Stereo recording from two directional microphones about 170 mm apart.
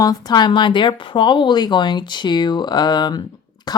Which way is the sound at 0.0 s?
20° left (ahead or behind).